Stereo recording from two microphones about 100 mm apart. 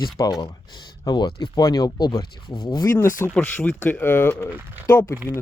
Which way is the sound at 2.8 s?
30° left (ahead or behind).